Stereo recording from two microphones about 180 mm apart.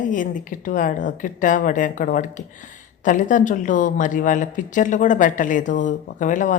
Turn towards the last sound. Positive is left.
turn(degrees=45)  # may be behind; listen again after turning